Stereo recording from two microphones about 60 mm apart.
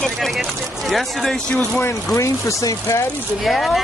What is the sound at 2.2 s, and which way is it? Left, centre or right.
Speech, left.